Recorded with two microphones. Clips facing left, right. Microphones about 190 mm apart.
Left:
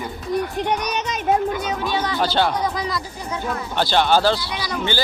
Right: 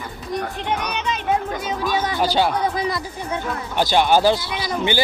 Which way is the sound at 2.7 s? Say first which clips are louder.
Right 2 dB; 25° right (ahead or behind).